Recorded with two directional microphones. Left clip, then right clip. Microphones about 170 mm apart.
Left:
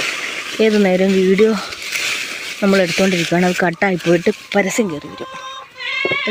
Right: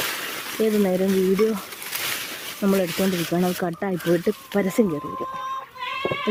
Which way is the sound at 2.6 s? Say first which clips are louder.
Left 8 dB; 10° left (ahead or behind).